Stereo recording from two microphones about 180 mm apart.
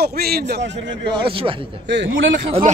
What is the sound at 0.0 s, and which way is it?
Speech, 60° right (ahead or behind).